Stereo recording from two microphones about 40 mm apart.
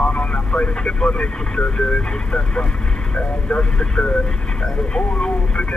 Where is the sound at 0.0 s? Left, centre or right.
Left.